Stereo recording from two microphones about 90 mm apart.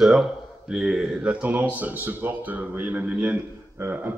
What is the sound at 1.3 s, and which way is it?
A man's voice, 15° right (ahead or behind).